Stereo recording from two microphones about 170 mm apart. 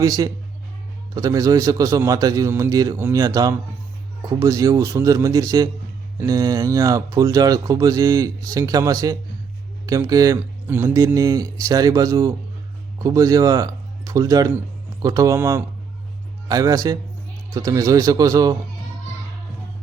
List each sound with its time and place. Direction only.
0.0 s speech: 20° right (ahead or behind)